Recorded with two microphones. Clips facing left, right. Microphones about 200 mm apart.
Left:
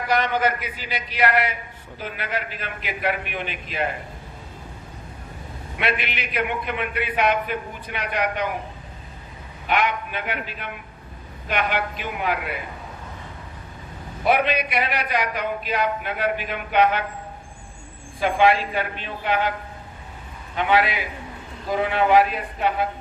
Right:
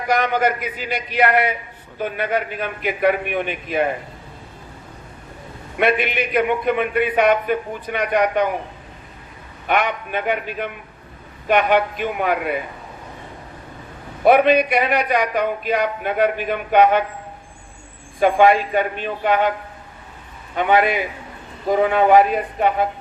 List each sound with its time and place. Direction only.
0.1 s a man's voice: 50° right (ahead or behind)
5.8 s a man's voice: 50° right (ahead or behind)
9.6 s a man's voice: 50° right (ahead or behind)
14.3 s a man's voice: 50° right (ahead or behind)
18.2 s a man's voice: 50° right (ahead or behind)
20.6 s a man's voice: 50° right (ahead or behind)